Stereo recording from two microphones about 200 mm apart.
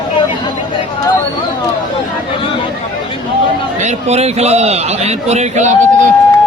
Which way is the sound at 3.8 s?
35° right (ahead or behind).